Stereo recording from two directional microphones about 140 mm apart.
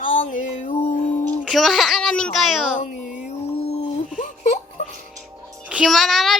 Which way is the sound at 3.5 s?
45° left (ahead or behind).